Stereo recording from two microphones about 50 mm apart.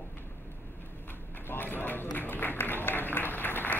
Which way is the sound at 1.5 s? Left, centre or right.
Left.